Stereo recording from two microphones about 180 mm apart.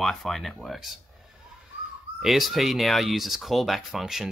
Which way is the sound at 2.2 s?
Centre (ahead or behind).